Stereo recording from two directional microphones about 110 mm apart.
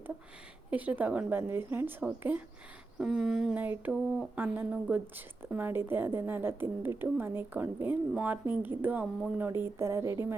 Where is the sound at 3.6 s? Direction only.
15° right (ahead or behind).